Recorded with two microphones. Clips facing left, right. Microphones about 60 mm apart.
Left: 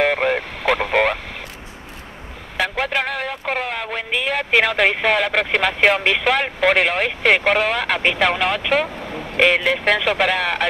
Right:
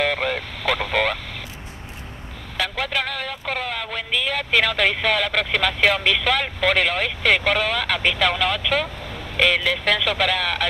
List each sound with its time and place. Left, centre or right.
0.0 s radio: left
2.5 s a sound: left
9.4 s speech: left